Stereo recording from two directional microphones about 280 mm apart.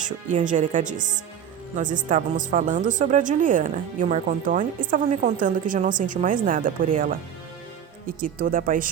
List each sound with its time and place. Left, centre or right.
0.0 s speech: right
8.4 s speech: right